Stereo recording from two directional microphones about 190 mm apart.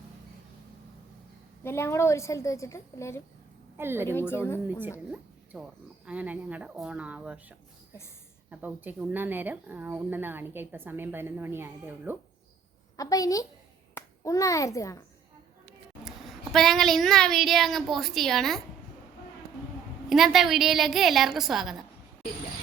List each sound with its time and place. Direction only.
1.6 s a woman's voice: 15° left (ahead or behind)
3.8 s speech: 10° right (ahead or behind)
4.1 s a woman's voice: 10° left (ahead or behind)
4.6 s speech: 10° right (ahead or behind)
8.4 s speech: 10° right (ahead or behind)
13.0 s a woman's voice: 20° left (ahead or behind)
16.0 s speech: centre (ahead or behind)
20.1 s speech: centre (ahead or behind)